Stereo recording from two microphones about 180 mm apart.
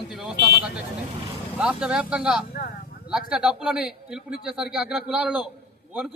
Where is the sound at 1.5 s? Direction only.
5° right (ahead or behind).